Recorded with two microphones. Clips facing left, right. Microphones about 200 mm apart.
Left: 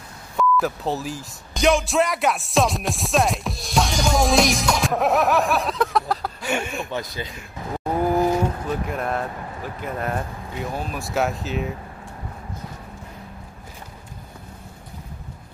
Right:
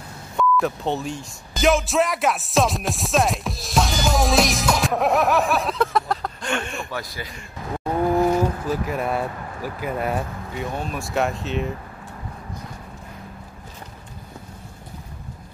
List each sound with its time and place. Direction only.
0.4 s speech: centre (ahead or behind)
6.9 s speech: 20° left (ahead or behind)
8.3 s speech: 5° right (ahead or behind)